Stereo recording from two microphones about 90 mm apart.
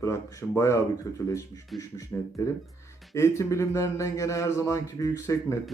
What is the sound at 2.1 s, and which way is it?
A man's voice, 25° left (ahead or behind).